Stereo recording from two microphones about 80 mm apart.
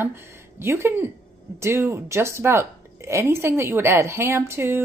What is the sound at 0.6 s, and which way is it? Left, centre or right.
A woman's voice, right.